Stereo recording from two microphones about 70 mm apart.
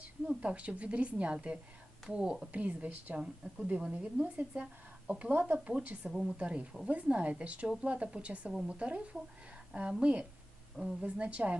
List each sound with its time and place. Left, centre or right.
0.0 s speech: centre
2.5 s speech: right
3.2 s speech: centre
5.3 s speech: right
5.6 s speech: centre
6.1 s speech: centre